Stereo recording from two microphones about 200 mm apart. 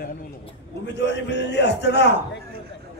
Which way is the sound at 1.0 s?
60° left (ahead or behind).